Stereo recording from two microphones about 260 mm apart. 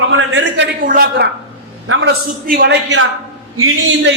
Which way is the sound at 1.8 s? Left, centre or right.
Right.